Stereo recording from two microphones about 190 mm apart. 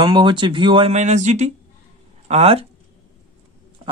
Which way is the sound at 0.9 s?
35° right (ahead or behind).